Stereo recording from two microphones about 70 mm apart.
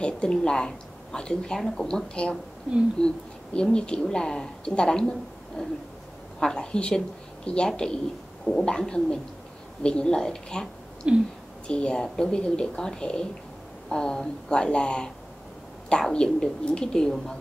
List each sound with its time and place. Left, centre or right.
0.0 s speech: centre
11.1 s speech: centre
11.6 s speech: centre